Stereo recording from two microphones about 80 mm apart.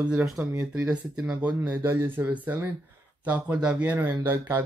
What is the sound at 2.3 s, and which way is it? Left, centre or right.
Speech, right.